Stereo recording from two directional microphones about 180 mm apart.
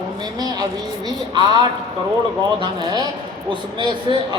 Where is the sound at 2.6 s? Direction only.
25° right (ahead or behind).